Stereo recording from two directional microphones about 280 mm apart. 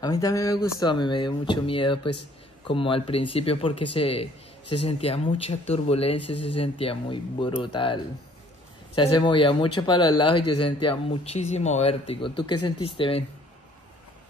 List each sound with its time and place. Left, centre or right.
0.0 s speech: centre